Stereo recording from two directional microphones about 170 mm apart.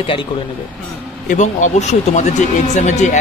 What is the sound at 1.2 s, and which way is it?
Speech, 45° left (ahead or behind).